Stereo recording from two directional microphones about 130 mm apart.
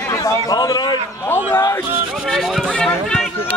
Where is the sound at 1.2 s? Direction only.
15° left (ahead or behind).